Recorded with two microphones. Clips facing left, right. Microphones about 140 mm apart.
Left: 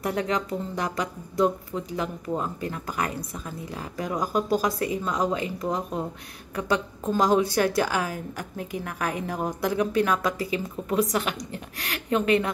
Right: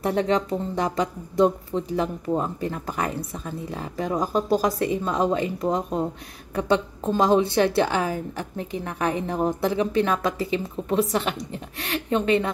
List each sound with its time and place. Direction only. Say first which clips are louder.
0.0 s a woman's voice: right 4 dB; 30° right (ahead or behind)
12.1 s speech: right 1 dB; 5° left (ahead or behind)